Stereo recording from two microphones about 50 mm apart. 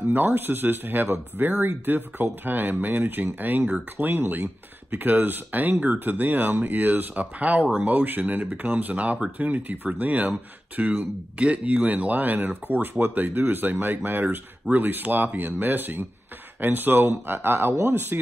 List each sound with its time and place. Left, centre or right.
0.1 s speech: right
11.3 s speech: right